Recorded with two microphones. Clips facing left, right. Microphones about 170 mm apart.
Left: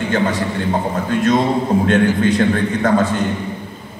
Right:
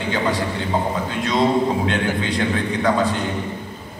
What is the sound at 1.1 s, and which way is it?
A man's voice, 50° left (ahead or behind).